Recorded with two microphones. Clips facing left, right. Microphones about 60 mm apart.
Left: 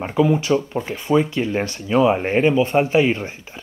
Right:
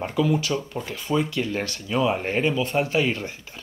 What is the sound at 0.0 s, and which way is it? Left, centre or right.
Speech, left.